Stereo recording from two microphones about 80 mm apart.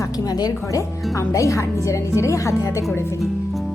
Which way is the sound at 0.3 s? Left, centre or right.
Left.